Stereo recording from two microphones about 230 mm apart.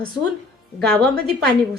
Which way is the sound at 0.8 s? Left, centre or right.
Centre.